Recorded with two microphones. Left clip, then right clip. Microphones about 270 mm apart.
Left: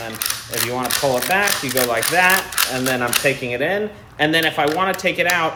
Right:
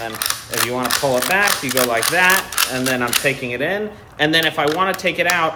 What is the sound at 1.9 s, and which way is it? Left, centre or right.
Speech, centre.